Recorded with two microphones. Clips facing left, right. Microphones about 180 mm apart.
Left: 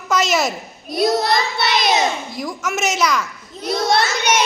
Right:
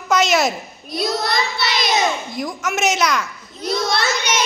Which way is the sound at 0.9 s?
55° left (ahead or behind).